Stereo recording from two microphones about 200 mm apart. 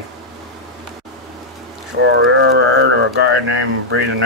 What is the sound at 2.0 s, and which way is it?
Speech, 65° right (ahead or behind).